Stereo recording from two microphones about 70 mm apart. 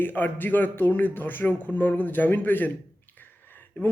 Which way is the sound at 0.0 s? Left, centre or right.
Left.